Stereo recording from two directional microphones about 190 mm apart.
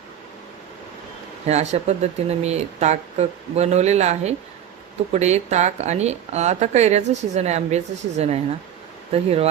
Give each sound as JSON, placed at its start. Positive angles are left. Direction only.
{"t": 1.5, "sound": "speech", "side_deg": -35}